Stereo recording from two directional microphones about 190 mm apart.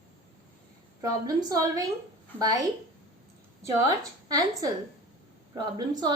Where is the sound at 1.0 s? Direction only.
20° right (ahead or behind).